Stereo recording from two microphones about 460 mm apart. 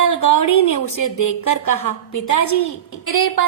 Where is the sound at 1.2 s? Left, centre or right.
Left.